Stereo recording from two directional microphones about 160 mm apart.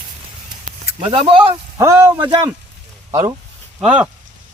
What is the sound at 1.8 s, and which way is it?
Speech, 15° right (ahead or behind).